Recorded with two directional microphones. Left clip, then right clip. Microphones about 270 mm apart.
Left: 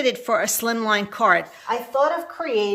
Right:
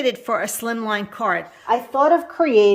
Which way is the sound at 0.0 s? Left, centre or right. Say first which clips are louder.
Even; centre.